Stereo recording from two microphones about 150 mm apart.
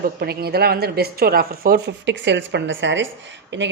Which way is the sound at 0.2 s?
90° right.